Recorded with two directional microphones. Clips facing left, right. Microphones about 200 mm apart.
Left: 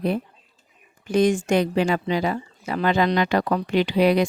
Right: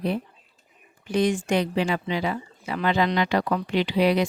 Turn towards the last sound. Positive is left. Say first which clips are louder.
# left 3 dB
turn(degrees=45)  # may be behind; listen again after turning